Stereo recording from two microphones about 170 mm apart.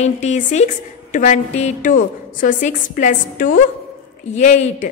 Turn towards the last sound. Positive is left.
turn(degrees=45)  # may be behind; listen again after turning